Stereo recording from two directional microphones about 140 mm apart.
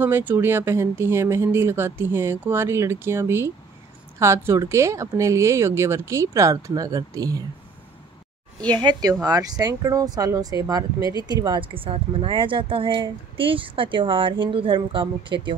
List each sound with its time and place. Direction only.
0.0 s speech: 15° right (ahead or behind)
8.6 s speech: 30° right (ahead or behind)